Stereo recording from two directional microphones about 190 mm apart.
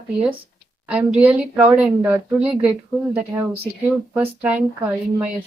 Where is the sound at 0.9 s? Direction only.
5° right (ahead or behind).